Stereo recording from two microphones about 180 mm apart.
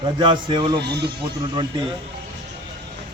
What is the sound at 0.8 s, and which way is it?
Speech, 65° right (ahead or behind).